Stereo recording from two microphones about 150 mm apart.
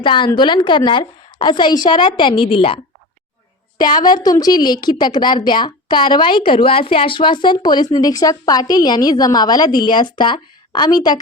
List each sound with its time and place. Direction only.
0.0 s a woman's voice: 30° left (ahead or behind)